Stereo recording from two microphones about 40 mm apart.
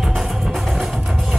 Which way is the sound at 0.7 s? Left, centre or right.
Centre.